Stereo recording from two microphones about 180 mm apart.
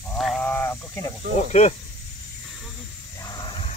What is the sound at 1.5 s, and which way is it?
Speech, 35° left (ahead or behind).